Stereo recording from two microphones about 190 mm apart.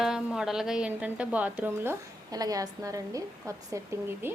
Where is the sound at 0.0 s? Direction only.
5° right (ahead or behind).